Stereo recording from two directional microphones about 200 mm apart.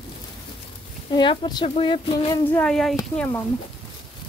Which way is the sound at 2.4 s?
5° left (ahead or behind).